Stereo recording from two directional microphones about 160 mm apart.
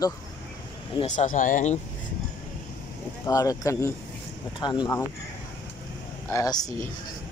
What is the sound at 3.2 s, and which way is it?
Speech, 20° left (ahead or behind).